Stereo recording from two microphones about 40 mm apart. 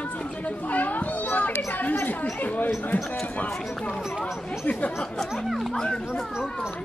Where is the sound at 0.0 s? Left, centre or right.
Left.